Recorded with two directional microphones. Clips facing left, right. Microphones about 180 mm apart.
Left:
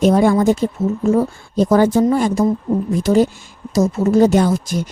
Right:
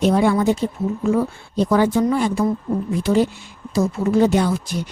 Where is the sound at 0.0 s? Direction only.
45° left (ahead or behind).